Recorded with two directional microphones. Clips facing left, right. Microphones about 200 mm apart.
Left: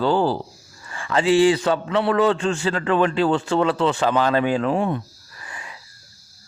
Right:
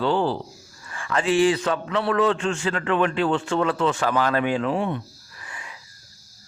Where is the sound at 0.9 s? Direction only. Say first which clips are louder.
Left 4 dB; 25° left (ahead or behind).